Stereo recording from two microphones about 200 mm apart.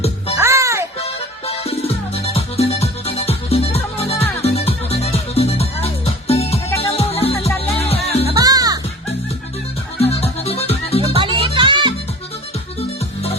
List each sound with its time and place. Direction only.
0.3 s music: 15° right (ahead or behind)
0.9 s music: 30° left (ahead or behind)
8.3 s music: 20° right (ahead or behind)
10.0 s music: 30° left (ahead or behind)
11.1 s music: 25° right (ahead or behind)